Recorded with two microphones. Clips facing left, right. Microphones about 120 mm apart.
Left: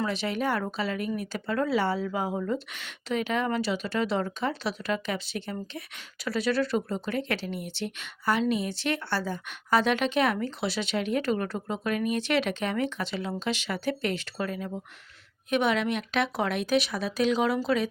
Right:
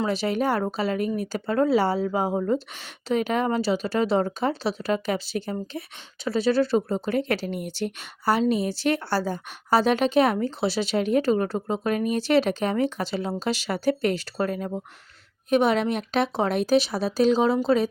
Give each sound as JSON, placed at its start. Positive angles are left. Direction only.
{"t": 0.1, "sound": "speech", "side_deg": -40}